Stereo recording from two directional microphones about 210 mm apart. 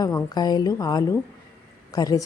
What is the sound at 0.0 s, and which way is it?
Speech, 20° left (ahead or behind).